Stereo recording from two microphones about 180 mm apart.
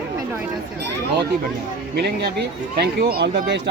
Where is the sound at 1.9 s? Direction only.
65° right (ahead or behind).